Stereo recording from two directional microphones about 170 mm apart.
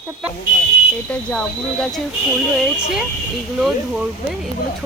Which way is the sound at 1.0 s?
5° left (ahead or behind).